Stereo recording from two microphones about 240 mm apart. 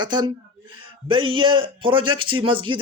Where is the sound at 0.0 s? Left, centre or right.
Centre.